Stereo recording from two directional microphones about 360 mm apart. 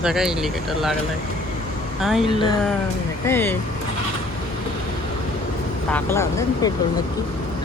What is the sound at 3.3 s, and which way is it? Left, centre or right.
Speech, centre.